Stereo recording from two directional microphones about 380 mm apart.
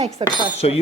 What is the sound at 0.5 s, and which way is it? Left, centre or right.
Speech, centre.